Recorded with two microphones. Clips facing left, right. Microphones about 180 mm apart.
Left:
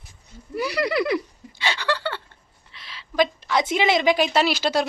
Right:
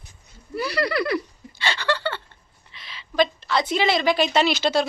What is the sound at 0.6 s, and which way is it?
Speech, 15° left (ahead or behind).